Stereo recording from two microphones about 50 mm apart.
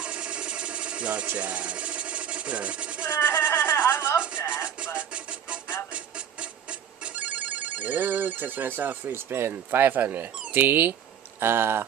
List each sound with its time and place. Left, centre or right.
0.0 s engine: centre
1.4 s a sound: right
3.1 s speech: left
4.9 s music: right
5.9 s telephone bell ringing: right
10.5 s speech: right